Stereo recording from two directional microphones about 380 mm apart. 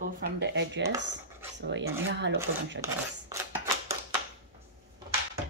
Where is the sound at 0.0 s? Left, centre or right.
Right.